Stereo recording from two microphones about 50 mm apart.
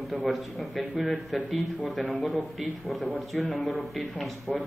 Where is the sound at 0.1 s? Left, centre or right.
Centre.